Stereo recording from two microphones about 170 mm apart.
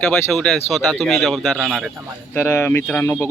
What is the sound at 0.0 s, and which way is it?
Speech, 5° left (ahead or behind).